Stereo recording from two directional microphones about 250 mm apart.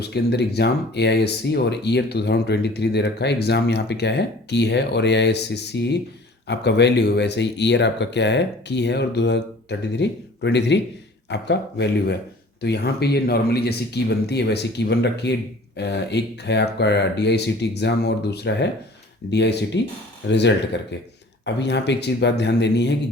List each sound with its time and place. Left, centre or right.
0.0 s speech: left